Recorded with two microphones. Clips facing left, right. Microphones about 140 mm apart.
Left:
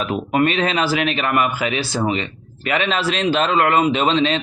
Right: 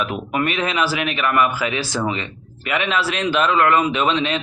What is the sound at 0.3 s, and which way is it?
A man's voice, 25° left (ahead or behind).